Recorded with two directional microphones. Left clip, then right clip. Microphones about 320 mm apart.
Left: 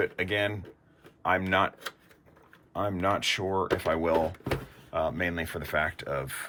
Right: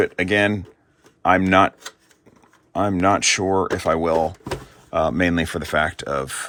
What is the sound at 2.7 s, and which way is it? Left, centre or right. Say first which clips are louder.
Speech: right 10 dB; centre.